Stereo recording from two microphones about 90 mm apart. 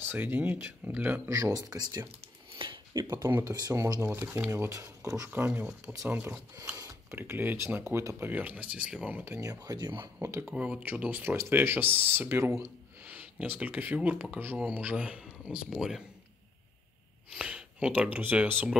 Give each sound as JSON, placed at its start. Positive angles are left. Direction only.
{"t": 0.0, "sound": "speech", "side_deg": -25}
{"t": 1.3, "sound": "speech", "side_deg": -40}
{"t": 3.3, "sound": "speech", "side_deg": -25}
{"t": 3.5, "sound": "speech", "side_deg": -40}
{"t": 4.5, "sound": "speech", "side_deg": -35}
{"t": 5.3, "sound": "speech", "side_deg": -20}
{"t": 8.3, "sound": "speech", "side_deg": -15}
{"t": 9.4, "sound": "speech", "side_deg": -45}
{"t": 10.4, "sound": "speech", "side_deg": -10}
{"t": 13.0, "sound": "speech", "side_deg": -20}
{"t": 17.3, "sound": "speech", "side_deg": -10}